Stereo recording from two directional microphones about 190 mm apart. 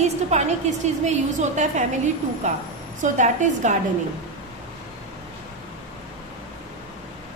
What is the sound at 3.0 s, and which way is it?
Speech, 40° right (ahead or behind).